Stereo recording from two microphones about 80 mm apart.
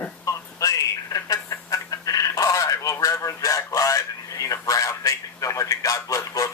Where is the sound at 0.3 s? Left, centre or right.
Left.